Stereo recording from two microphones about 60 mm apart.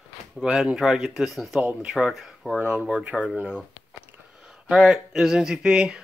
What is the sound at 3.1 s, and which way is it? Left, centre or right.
Speech, centre.